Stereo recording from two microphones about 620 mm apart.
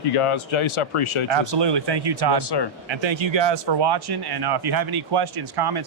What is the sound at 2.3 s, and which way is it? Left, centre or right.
Speech, left.